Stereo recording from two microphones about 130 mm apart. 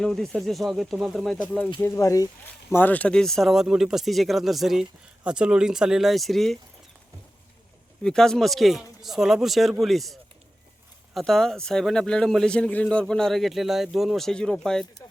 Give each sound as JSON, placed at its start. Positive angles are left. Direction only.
{"t": 0.0, "sound": "speech", "side_deg": 5}
{"t": 1.8, "sound": "speech", "side_deg": 20}
{"t": 2.7, "sound": "speech", "side_deg": 15}
{"t": 8.0, "sound": "speech", "side_deg": 5}